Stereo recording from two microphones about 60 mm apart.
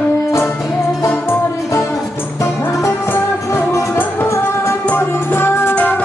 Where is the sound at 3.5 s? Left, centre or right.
Left.